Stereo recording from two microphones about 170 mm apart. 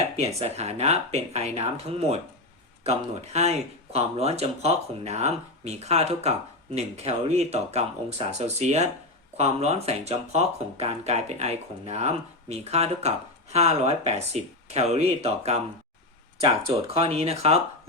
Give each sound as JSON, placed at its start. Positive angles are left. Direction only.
{"t": 0.2, "sound": "speech", "side_deg": -35}